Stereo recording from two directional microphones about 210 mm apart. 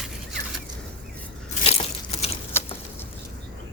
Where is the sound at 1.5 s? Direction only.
30° left (ahead or behind).